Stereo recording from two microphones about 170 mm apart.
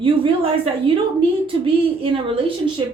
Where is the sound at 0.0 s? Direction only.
30° right (ahead or behind).